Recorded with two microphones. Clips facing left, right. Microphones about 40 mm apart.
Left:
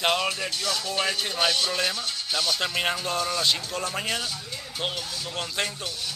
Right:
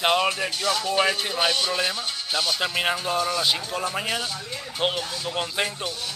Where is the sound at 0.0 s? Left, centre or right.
Centre.